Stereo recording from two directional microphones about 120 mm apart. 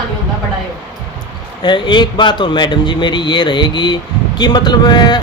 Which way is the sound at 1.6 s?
40° left (ahead or behind).